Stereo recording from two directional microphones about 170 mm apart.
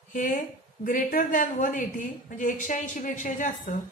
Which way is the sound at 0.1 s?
50° left (ahead or behind).